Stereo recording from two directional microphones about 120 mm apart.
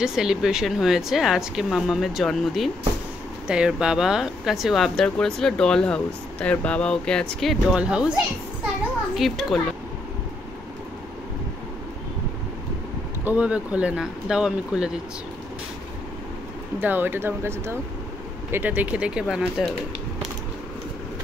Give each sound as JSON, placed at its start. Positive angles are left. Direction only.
{"t": 0.0, "sound": "speech", "side_deg": -5}
{"t": 7.7, "sound": "speech", "side_deg": -10}
{"t": 13.2, "sound": "speech", "side_deg": -10}
{"t": 16.8, "sound": "speech", "side_deg": -15}